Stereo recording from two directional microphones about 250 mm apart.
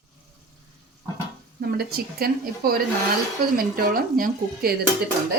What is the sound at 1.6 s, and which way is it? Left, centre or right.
Speech, right.